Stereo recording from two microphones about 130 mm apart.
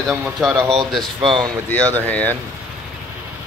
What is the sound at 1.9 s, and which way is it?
Speech, 10° left (ahead or behind).